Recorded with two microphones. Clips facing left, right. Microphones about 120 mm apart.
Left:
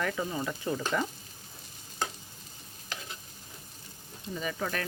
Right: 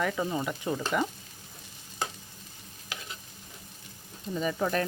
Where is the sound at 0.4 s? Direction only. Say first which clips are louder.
Right 1 dB; 20° right (ahead or behind).